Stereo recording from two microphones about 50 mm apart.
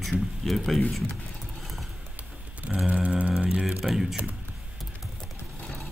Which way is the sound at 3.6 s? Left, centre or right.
Centre.